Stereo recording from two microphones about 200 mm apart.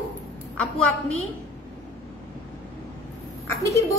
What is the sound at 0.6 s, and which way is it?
Speech, 5° left (ahead or behind).